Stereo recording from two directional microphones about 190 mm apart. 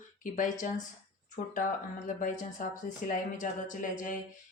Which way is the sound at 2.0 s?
40° left (ahead or behind).